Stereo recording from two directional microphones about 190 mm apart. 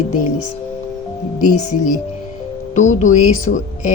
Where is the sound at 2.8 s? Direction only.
40° left (ahead or behind).